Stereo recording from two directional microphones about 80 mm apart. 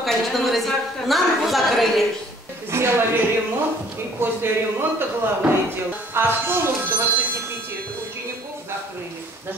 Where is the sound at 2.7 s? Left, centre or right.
Right.